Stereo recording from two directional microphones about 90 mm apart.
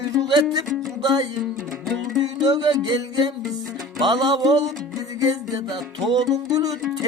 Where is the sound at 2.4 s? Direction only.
50° right (ahead or behind).